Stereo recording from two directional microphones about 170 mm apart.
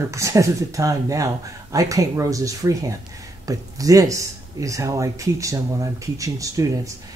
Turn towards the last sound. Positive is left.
turn(degrees=-20)  # may be behind; listen again after turning